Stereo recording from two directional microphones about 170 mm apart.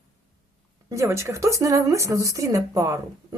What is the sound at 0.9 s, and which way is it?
Speech, 15° right (ahead or behind).